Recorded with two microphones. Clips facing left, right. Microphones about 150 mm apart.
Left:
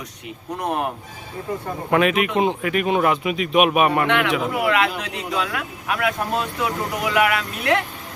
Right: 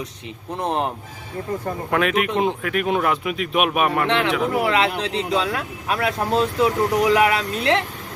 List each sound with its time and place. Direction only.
0.6 s speech: 25° right (ahead or behind)
1.9 s speech: 5° left (ahead or behind)
4.0 s speech: 30° right (ahead or behind)